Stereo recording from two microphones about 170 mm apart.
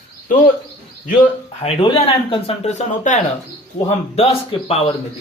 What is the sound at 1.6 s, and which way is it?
Speech, 35° left (ahead or behind).